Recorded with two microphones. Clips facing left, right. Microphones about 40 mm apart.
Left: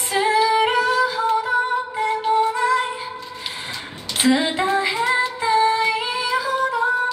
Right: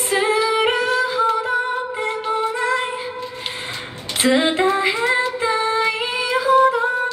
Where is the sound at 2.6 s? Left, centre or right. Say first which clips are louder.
Left 1 dB; right.